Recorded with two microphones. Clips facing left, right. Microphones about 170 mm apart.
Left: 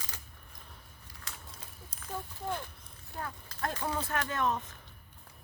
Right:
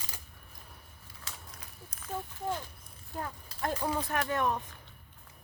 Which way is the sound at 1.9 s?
30° left (ahead or behind).